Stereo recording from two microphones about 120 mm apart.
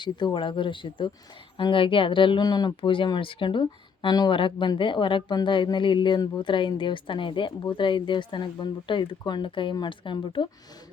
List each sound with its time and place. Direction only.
0.0 s speech: 40° left (ahead or behind)